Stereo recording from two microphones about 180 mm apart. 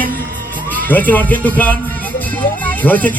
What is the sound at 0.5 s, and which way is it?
Music, 10° left (ahead or behind).